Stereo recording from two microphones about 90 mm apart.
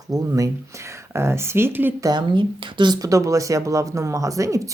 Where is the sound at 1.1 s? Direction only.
30° right (ahead or behind).